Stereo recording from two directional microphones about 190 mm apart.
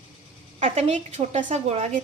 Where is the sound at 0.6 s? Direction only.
35° right (ahead or behind).